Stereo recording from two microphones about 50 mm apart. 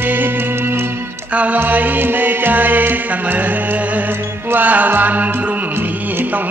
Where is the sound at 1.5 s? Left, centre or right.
Right.